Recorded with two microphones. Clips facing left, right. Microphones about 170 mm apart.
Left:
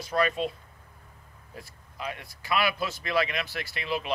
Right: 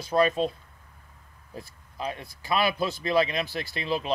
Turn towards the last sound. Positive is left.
turn(degrees=-30)  # may be behind; listen again after turning